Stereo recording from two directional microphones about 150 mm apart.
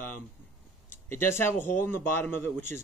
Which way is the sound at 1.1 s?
15° left (ahead or behind).